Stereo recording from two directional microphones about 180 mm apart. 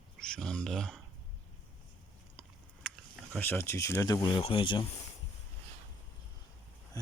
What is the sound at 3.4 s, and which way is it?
Speech, 15° left (ahead or behind).